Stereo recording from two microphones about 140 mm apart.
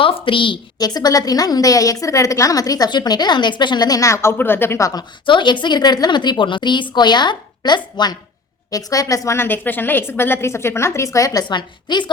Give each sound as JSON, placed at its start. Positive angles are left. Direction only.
{"t": 0.0, "sound": "a woman's voice", "side_deg": 40}